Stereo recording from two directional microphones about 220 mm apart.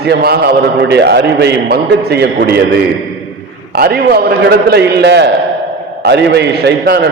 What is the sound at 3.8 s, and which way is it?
A man's voice, 45° right (ahead or behind).